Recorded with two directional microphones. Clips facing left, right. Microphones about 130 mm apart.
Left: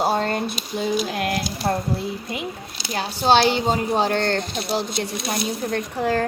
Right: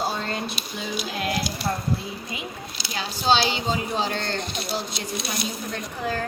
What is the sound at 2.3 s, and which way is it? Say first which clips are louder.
Speech: left 4 dB; 65° left (ahead or behind).